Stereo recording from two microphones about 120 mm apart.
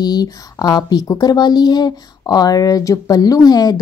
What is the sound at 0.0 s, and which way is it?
A woman's voice, 35° left (ahead or behind).